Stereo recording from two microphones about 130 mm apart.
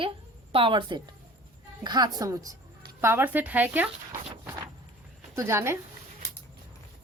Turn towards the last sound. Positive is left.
turn(degrees=-20)  # may be behind; listen again after turning